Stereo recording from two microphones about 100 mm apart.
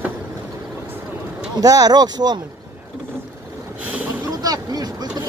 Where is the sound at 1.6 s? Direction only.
40° right (ahead or behind).